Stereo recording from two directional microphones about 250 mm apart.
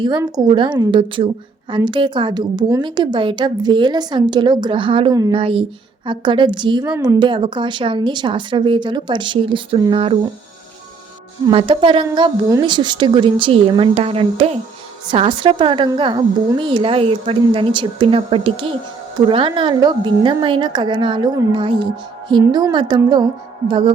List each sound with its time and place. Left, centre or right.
0.0 s a woman's voice: centre
11.4 s a woman's voice: right